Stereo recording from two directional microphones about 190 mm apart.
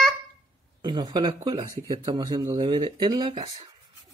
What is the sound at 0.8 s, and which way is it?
Speech, 25° right (ahead or behind).